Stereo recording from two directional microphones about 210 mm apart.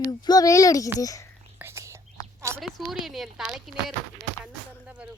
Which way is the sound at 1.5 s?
10° right (ahead or behind).